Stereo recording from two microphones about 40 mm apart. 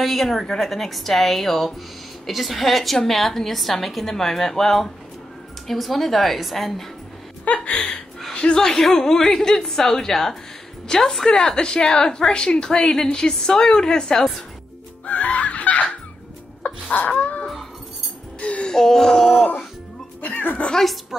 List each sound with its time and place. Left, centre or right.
0.0 s a woman's voice: centre
7.4 s a sound: left
8.5 s a woman's voice: centre
15.0 s music: left
16.6 s wail: left
17.2 s a sound: left
18.4 s music: left
18.7 s speech: centre
20.2 s music: left
20.7 s a woman's voice: centre